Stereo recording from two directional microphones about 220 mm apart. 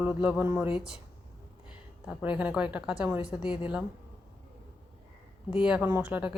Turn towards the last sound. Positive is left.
turn(degrees=-5)  # may be behind; listen again after turning